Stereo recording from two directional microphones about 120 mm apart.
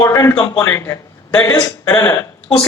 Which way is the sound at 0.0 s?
25° left (ahead or behind).